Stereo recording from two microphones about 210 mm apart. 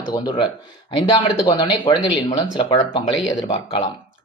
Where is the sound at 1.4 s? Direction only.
20° left (ahead or behind).